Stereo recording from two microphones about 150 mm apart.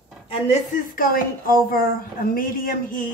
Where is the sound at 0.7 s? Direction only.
70° left (ahead or behind).